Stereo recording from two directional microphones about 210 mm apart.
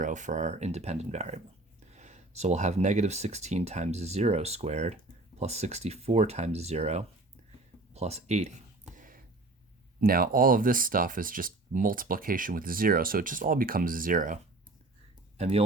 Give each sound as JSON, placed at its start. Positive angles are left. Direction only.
{"t": 0.0, "sound": "speech", "side_deg": -35}
{"t": 9.0, "sound": "a sound", "side_deg": -40}
{"t": 10.0, "sound": "speech", "side_deg": -45}
{"t": 15.4, "sound": "speech", "side_deg": -30}